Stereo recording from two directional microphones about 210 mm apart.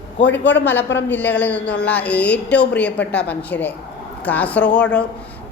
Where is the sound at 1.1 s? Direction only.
10° left (ahead or behind).